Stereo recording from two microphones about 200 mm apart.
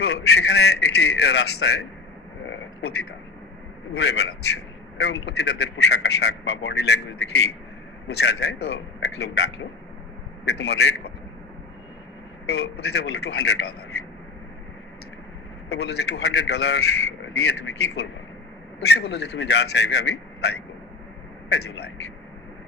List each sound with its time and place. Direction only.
0.0 s a man's voice: 55° left (ahead or behind)
2.5 s a sound: 55° left (ahead or behind)
3.9 s a man's voice: 60° left (ahead or behind)
12.5 s a man's voice: 55° left (ahead or behind)
15.7 s a man's voice: 55° left (ahead or behind)